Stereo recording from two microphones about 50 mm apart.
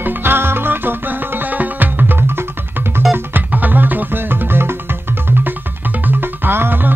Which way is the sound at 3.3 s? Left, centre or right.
Right.